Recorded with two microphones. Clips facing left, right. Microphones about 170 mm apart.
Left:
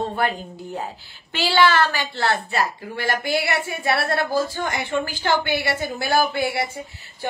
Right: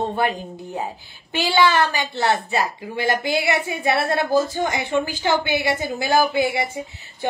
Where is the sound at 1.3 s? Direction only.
15° right (ahead or behind).